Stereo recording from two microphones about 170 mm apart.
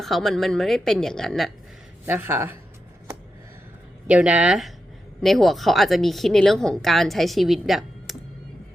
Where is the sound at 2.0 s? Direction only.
10° right (ahead or behind).